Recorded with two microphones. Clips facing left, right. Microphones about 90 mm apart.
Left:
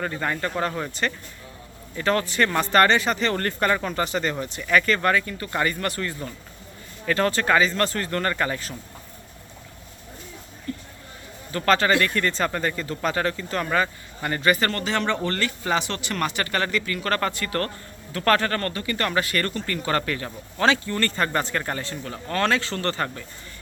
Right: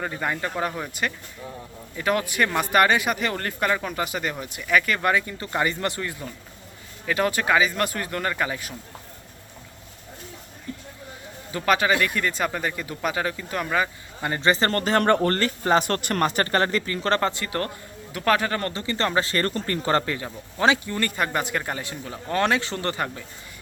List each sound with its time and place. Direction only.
0.0 s speech: 10° right (ahead or behind)
5.0 s speech: 15° right (ahead or behind)
11.5 s speech: 10° right (ahead or behind)
14.2 s speech: 20° right (ahead or behind)
14.7 s speech: 45° right (ahead or behind); by 17.7 s 20° right (ahead or behind)
18.1 s speech: 10° right (ahead or behind)
18.7 s speech: 25° right (ahead or behind)